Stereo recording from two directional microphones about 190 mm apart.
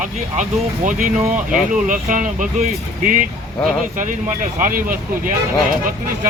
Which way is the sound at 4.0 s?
45° right (ahead or behind).